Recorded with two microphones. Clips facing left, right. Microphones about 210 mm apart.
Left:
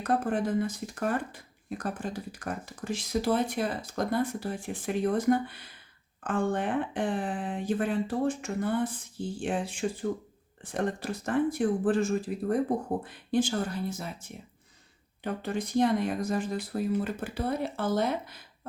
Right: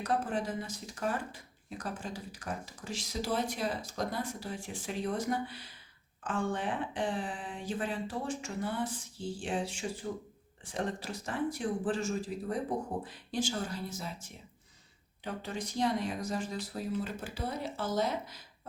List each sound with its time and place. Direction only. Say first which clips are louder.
0.0 s speech: left 5 dB; 55° left (ahead or behind)